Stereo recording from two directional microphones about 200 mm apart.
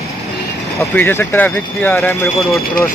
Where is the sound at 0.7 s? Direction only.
10° left (ahead or behind).